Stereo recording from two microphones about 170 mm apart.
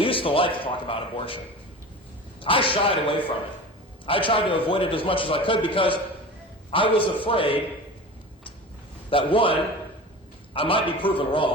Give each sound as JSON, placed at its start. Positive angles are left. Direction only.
{"t": 0.0, "sound": "a man's voice", "side_deg": 30}
{"t": 2.4, "sound": "a man's voice", "side_deg": 30}
{"t": 9.0, "sound": "a man's voice", "side_deg": 30}